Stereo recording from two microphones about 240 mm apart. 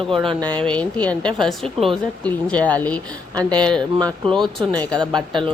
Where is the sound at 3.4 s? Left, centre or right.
Centre.